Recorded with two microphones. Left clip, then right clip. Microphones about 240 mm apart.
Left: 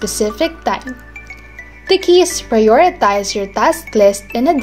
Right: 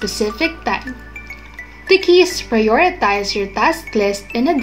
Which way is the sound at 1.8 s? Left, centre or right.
Left.